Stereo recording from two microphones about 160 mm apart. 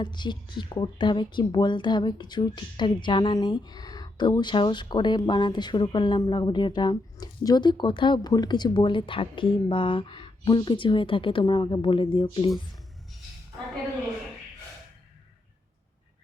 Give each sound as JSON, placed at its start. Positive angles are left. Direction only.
{"t": 0.0, "sound": "speech", "side_deg": 30}